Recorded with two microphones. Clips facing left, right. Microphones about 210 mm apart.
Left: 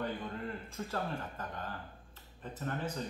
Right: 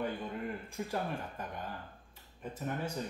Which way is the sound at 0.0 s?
10° right (ahead or behind).